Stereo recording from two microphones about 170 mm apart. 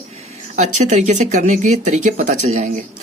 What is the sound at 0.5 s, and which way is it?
Speech, 45° right (ahead or behind).